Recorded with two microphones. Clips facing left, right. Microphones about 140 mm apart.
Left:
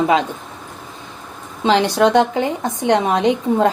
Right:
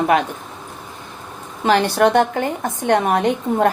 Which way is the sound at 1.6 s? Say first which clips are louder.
Left 1 dB; 15° left (ahead or behind).